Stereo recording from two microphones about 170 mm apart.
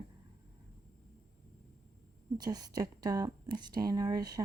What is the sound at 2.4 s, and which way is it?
Speech, 25° right (ahead or behind).